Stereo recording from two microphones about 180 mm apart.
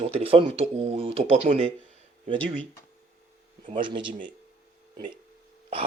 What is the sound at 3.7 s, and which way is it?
Speech, 25° right (ahead or behind).